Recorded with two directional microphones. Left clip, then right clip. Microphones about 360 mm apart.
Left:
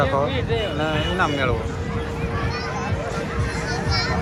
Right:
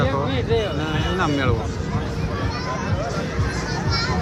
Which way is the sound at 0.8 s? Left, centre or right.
Centre.